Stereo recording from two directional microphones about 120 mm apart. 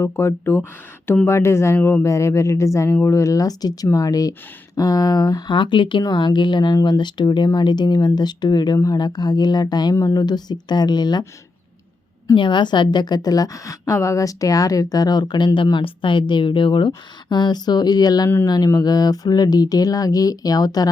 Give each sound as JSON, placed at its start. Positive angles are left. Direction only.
{"t": 0.0, "sound": "a woman's voice", "side_deg": 20}
{"t": 9.9, "sound": "a woman's voice", "side_deg": 20}
{"t": 10.2, "sound": "speech", "side_deg": 35}
{"t": 12.3, "sound": "speech", "side_deg": 40}